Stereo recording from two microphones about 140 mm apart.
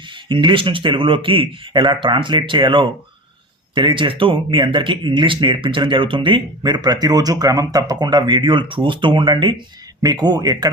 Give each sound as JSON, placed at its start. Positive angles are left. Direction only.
{"t": 0.3, "sound": "speech", "side_deg": -35}